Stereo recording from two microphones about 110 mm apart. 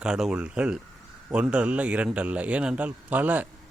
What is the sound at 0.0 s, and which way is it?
A man's voice, 5° right (ahead or behind).